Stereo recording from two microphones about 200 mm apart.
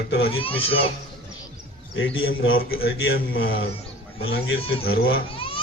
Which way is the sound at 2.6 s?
50° left (ahead or behind).